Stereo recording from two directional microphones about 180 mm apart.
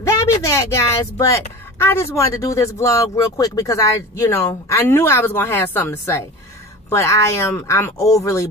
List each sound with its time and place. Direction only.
0.0 s speech: 15° left (ahead or behind)